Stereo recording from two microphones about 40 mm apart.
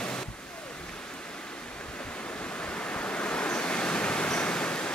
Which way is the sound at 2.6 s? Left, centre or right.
Left.